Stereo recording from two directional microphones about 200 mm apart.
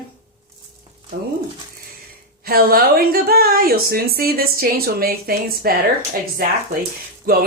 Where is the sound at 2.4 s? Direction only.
50° right (ahead or behind).